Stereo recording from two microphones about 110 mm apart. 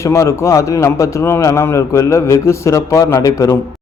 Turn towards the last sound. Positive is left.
turn(degrees=30)  # may be behind; listen again after turning